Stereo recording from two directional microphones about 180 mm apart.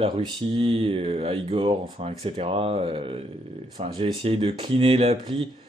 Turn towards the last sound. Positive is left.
turn(degrees=-30)  # may be behind; listen again after turning